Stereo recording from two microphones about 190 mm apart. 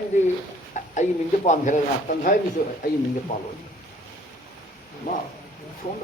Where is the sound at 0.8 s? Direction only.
40° left (ahead or behind).